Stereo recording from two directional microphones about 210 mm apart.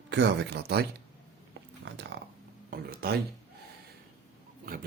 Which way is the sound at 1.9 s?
55° right (ahead or behind).